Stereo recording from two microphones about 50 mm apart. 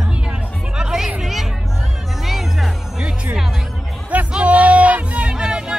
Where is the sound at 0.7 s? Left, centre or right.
Centre.